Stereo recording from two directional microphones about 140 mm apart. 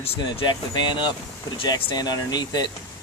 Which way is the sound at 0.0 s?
45° left (ahead or behind).